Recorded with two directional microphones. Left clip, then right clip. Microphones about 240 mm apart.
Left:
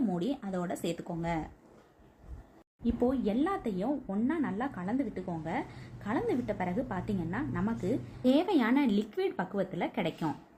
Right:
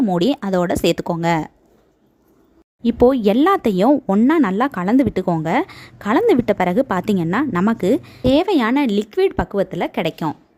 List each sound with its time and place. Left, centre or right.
0.1 s speech: right
2.8 s speech: right